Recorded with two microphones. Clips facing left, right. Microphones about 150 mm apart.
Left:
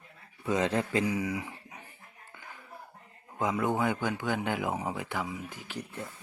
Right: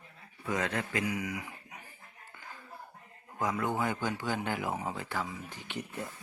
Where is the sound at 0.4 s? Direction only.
25° left (ahead or behind).